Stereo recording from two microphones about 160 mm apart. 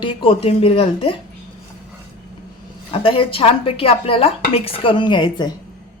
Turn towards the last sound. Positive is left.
turn(degrees=30)  # may be behind; listen again after turning